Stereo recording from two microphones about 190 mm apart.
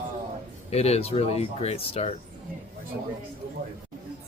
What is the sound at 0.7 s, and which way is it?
Speech, 35° left (ahead or behind).